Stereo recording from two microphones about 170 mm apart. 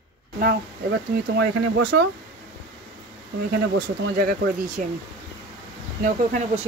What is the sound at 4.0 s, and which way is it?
Speech, 55° right (ahead or behind).